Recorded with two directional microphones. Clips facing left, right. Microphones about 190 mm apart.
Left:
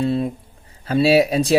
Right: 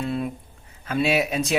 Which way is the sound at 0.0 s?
30° left (ahead or behind).